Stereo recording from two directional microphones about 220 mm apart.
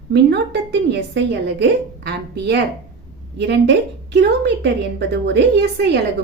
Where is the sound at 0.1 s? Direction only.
50° right (ahead or behind).